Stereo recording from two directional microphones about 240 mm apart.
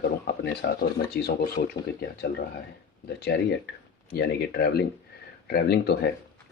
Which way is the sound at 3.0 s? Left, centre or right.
Left.